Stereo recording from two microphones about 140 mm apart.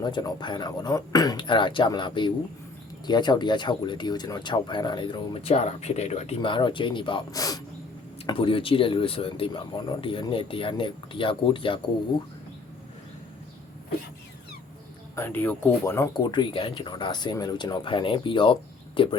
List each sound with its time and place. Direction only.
0.0 s speech: 30° left (ahead or behind); by 6.3 s 55° left (ahead or behind)
6.4 s speech: 35° left (ahead or behind)
7.3 s speech: 25° left (ahead or behind)
8.3 s speech: 40° left (ahead or behind)
15.1 s speech: 15° left (ahead or behind)
16.1 s speech: 35° left (ahead or behind)